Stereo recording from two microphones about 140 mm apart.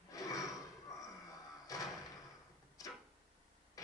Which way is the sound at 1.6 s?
25° left (ahead or behind).